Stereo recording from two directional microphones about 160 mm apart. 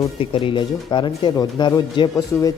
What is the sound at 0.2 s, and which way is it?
Speech, 35° left (ahead or behind).